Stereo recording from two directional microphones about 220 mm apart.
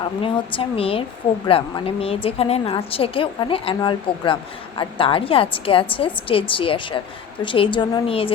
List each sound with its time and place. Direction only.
0.0 s a woman's voice: 25° left (ahead or behind)